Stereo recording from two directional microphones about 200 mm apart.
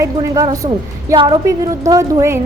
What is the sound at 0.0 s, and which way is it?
A woman's voice, 15° right (ahead or behind).